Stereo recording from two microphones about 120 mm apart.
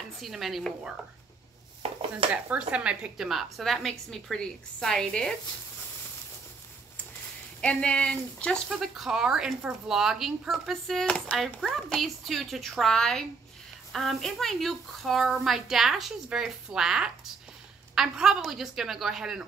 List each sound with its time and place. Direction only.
0.2 s speech: centre (ahead or behind)
1.8 s dishes: 55° right (ahead or behind)
2.7 s speech: 10° right (ahead or behind)
7.6 s speech: 10° left (ahead or behind)